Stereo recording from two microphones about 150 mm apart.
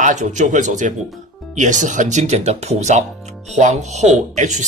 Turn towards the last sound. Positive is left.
turn(degrees=-50)  # may be behind; listen again after turning